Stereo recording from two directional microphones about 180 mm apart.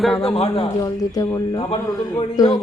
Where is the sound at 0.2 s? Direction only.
30° left (ahead or behind).